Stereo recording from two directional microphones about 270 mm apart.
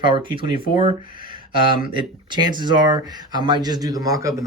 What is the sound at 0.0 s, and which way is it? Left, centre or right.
Speech, centre.